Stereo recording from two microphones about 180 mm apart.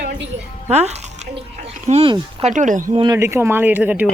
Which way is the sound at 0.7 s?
35° right (ahead or behind).